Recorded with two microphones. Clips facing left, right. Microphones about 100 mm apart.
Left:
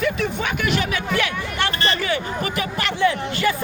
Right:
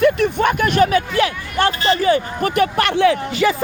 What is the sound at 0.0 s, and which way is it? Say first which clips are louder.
Speech: right 8 dB; 55° right (ahead or behind).